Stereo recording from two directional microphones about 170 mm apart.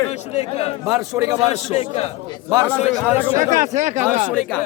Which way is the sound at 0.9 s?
20° right (ahead or behind).